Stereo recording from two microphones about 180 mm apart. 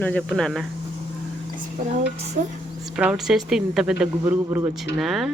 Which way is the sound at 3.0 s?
5° right (ahead or behind).